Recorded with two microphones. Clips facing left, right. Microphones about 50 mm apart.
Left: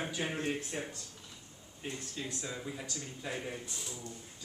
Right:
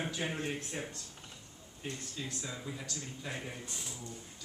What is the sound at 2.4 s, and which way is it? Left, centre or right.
A man's voice, centre.